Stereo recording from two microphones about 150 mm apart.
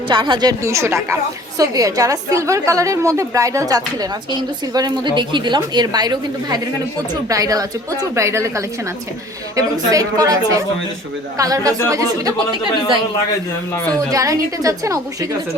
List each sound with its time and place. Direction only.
0.1 s a woman's voice: 30° right (ahead or behind)
0.6 s a woman's voice: 20° right (ahead or behind)
14.1 s a woman's voice: 20° right (ahead or behind)